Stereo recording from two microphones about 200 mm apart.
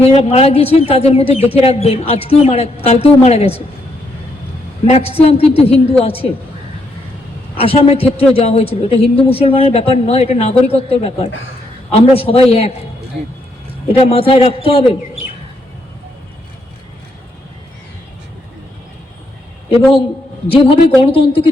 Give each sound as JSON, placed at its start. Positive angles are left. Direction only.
{"t": 0.0, "sound": "a woman's voice", "side_deg": 30}
{"t": 4.9, "sound": "speech", "side_deg": 30}
{"t": 7.5, "sound": "speech", "side_deg": 30}
{"t": 13.9, "sound": "speech", "side_deg": 30}
{"t": 20.5, "sound": "speech", "side_deg": 25}